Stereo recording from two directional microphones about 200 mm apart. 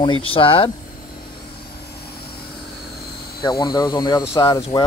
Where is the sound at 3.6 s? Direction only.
20° left (ahead or behind).